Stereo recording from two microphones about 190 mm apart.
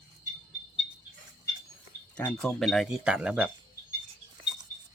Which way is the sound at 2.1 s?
5° left (ahead or behind).